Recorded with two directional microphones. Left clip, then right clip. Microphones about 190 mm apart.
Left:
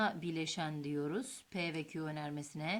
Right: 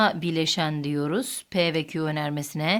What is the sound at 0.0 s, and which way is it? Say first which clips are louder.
Speech: right 14 dB; 35° right (ahead or behind).